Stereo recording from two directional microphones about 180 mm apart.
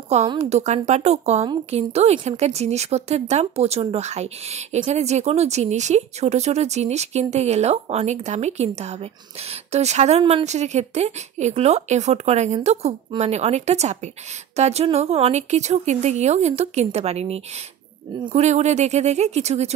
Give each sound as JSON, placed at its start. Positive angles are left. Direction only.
{"t": 0.3, "sound": "a woman's voice", "side_deg": -35}